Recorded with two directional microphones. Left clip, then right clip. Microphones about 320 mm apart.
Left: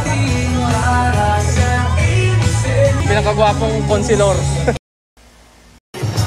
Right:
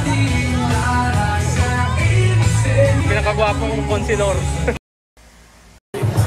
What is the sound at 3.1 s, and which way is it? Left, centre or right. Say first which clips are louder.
Speech: left 4 dB; centre.